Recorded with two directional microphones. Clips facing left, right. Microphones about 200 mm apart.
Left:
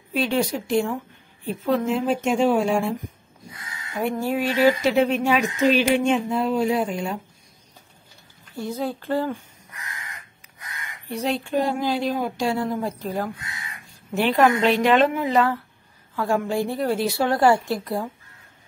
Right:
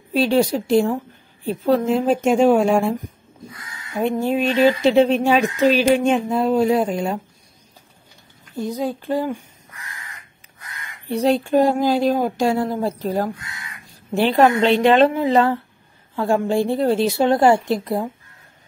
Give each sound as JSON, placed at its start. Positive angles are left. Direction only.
{"t": 0.1, "sound": "speech", "side_deg": -35}
{"t": 3.9, "sound": "speech", "side_deg": -20}
{"t": 8.5, "sound": "speech", "side_deg": -15}
{"t": 11.1, "sound": "a woman's voice", "side_deg": -35}